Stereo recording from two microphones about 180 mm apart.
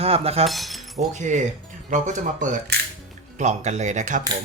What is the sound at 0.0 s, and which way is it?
Speech, 35° right (ahead or behind).